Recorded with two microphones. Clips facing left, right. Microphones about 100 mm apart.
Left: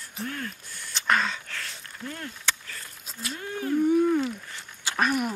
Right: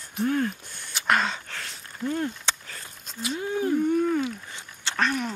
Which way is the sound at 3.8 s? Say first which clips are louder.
Left 2 dB; 5° left (ahead or behind).